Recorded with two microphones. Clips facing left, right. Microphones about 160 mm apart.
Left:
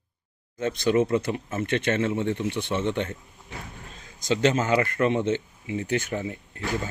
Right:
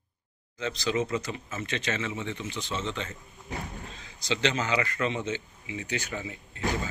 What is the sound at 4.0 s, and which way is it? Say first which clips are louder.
A man's voice: left 6 dB; 45° left (ahead or behind).